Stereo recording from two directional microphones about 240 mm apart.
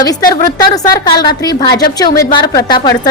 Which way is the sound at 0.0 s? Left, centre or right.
Centre.